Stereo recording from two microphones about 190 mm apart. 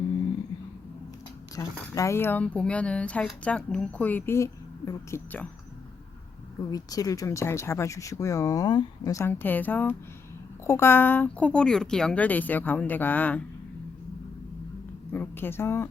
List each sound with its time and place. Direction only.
1.5 s speech: 15° left (ahead or behind)
6.7 s speech: 20° left (ahead or behind)
15.1 s speech: 10° left (ahead or behind)